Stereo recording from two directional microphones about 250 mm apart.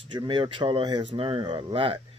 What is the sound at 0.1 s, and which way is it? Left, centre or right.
Speech, centre.